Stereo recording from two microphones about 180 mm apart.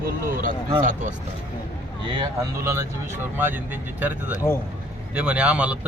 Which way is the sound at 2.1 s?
20° right (ahead or behind).